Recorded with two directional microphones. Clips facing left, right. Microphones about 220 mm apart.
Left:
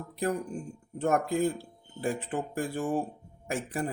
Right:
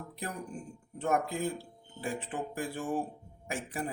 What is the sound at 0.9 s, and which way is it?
Speech, 45° left (ahead or behind).